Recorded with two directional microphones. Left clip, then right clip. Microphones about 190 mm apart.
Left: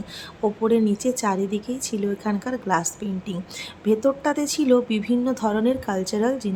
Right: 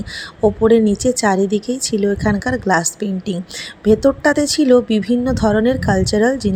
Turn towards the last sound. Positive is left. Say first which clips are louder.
# right 8 dB
turn(degrees=-25)  # may be behind; listen again after turning